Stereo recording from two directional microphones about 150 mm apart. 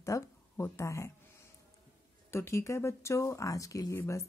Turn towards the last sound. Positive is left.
turn(degrees=20)  # may be behind; listen again after turning